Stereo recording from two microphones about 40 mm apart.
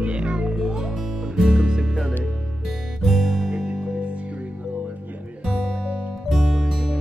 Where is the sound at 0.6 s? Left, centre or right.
Centre.